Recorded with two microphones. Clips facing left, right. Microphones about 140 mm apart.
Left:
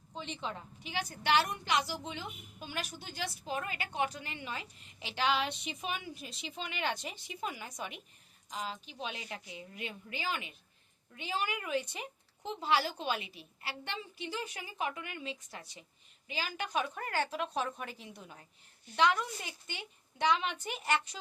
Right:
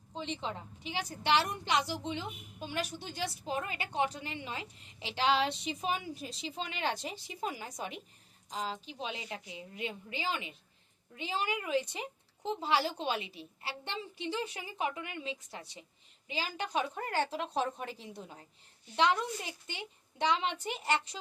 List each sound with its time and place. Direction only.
0.1 s a woman's voice: 25° right (ahead or behind)